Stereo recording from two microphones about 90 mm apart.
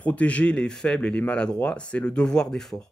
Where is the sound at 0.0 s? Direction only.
15° left (ahead or behind).